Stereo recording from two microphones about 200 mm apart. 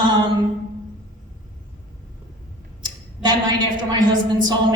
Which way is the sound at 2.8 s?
20° right (ahead or behind).